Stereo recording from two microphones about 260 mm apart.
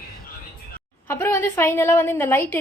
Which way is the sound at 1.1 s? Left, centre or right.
Centre.